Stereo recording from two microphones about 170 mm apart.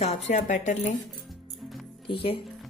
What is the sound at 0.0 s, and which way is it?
Speech, 40° left (ahead or behind).